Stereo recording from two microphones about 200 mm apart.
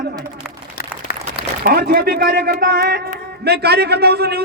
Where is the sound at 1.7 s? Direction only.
45° right (ahead or behind).